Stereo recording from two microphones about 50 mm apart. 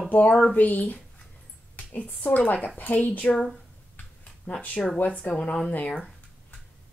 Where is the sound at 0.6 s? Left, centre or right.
Left.